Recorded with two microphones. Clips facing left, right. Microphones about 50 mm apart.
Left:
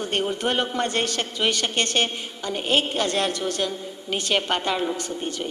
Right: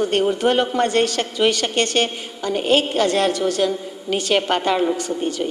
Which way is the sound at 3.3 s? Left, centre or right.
Left.